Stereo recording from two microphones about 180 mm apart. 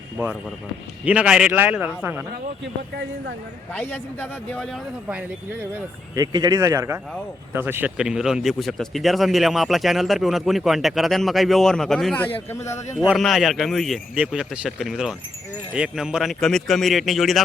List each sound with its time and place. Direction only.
1.0 s a man's voice: 5° right (ahead or behind)
2.9 s a man's voice: 70° right (ahead or behind)
3.8 s a man's voice: 10° left (ahead or behind)
5.0 s a man's voice: 10° right (ahead or behind)
6.3 s a man's voice: 20° right (ahead or behind); by 12.3 s 5° left (ahead or behind)
12.5 s a man's voice: 15° left (ahead or behind)
13.1 s speech: centre (ahead or behind)